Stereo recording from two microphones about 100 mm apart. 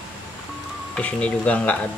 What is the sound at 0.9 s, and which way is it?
Speech, 10° left (ahead or behind).